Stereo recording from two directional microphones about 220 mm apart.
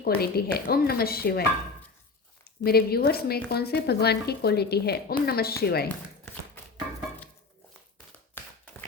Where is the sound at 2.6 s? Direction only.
45° left (ahead or behind).